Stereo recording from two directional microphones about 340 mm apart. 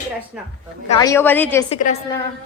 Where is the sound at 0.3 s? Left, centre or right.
Centre.